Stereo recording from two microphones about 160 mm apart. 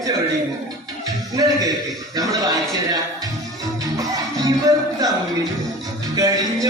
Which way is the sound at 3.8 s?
20° right (ahead or behind).